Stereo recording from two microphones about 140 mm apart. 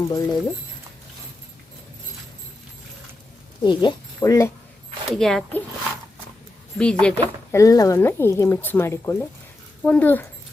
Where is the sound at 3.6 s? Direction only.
35° left (ahead or behind).